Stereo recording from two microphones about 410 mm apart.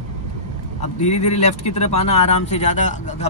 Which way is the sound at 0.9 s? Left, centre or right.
Centre.